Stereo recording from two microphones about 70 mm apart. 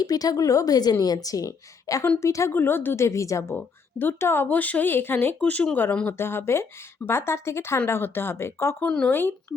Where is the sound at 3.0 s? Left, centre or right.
Left.